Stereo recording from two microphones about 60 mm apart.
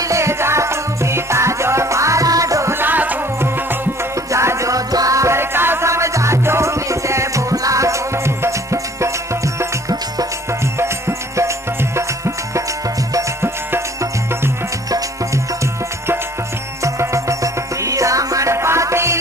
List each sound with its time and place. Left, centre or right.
0.0 s music: right
2.7 s music: right
4.3 s music: right
5.4 s music: right
5.9 s music: right
10.8 s music: right
13.4 s music: right
14.9 s music: right
16.8 s music: right